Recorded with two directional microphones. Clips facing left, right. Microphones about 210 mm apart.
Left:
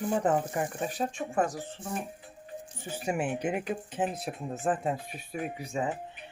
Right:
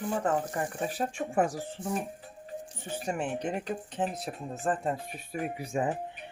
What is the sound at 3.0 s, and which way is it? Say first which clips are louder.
A woman's voice: left 2 dB; 10° left (ahead or behind).